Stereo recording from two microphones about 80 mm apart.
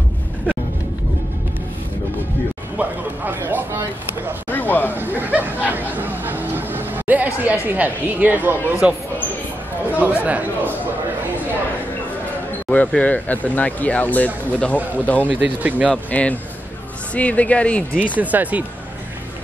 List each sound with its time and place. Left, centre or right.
2.8 s speech: right
3.3 s a sound: right
4.5 s a sound: left
4.9 s hubbub: right
7.6 s speech: right
10.2 s speech: centre
12.6 s speech: centre
15.2 s speech: centre
15.9 s speech: centre
18.1 s speech: centre